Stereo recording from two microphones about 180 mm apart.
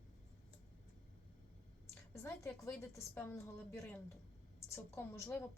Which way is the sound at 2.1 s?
15° left (ahead or behind).